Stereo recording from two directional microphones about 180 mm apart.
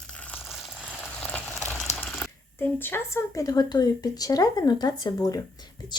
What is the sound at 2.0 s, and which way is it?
Speech, 10° left (ahead or behind).